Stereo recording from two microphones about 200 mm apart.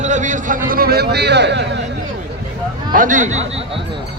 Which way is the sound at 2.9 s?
40° right (ahead or behind).